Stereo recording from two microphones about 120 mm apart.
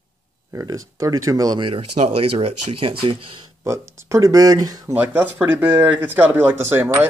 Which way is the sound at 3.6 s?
25° right (ahead or behind).